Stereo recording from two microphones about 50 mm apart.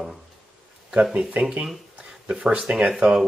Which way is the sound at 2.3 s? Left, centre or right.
Centre.